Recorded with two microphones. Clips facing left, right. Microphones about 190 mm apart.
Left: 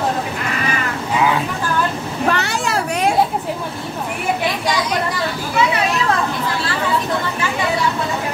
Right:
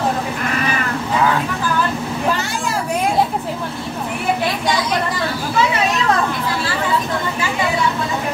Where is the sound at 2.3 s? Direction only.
70° left (ahead or behind).